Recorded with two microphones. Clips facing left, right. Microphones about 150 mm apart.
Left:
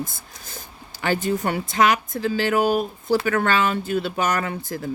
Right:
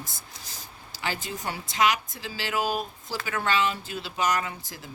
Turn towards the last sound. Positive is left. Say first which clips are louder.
# left 8 dB
turn(degrees=50)  # may be behind; listen again after turning